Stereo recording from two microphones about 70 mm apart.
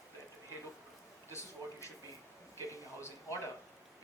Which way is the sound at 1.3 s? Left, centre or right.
Left.